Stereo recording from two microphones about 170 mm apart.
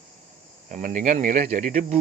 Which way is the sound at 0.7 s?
50° right (ahead or behind).